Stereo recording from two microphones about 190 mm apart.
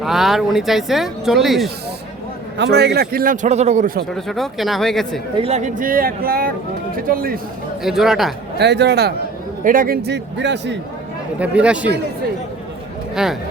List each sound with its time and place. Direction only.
0.0 s speech: centre (ahead or behind)
2.6 s a man's voice: 60° right (ahead or behind); by 4.0 s 45° right (ahead or behind)
4.1 s speech: centre (ahead or behind)
5.4 s a man's voice: 35° right (ahead or behind); by 7.3 s 50° right (ahead or behind)
7.9 s speech: centre (ahead or behind)
8.5 s a man's voice: 60° right (ahead or behind)
9.6 s a man's voice: 50° right (ahead or behind); by 10.8 s 65° right (ahead or behind)
11.3 s speech: 5° right (ahead or behind)
13.2 s speech: 5° right (ahead or behind)